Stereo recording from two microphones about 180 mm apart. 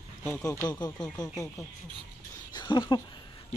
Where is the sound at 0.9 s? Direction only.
5° left (ahead or behind).